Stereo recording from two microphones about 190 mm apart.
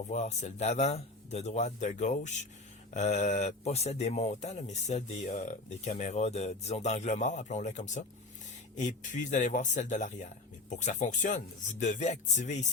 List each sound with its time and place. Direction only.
0.1 s speech: 35° left (ahead or behind)